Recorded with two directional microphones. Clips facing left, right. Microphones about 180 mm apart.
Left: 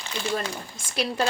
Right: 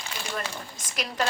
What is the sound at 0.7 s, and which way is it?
Speech, 30° left (ahead or behind).